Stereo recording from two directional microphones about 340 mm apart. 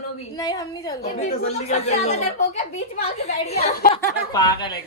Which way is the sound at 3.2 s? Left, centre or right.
Centre.